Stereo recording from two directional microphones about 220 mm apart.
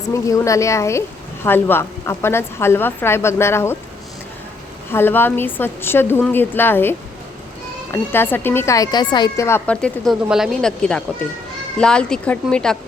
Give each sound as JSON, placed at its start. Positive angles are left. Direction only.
{"t": 0.1, "sound": "speech", "side_deg": 15}
{"t": 4.9, "sound": "speech", "side_deg": 10}
{"t": 8.1, "sound": "a woman's voice", "side_deg": 10}